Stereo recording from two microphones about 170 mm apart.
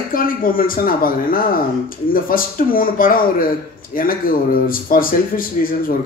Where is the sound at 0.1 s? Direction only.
55° left (ahead or behind).